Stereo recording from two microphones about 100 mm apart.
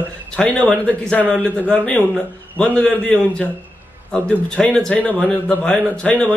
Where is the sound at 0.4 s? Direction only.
10° left (ahead or behind).